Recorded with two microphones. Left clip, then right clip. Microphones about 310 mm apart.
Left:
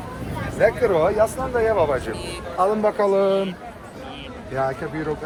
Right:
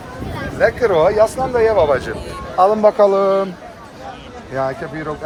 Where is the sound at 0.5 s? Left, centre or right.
Centre.